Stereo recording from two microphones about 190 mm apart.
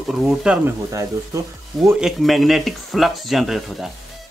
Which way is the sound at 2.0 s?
Centre (ahead or behind).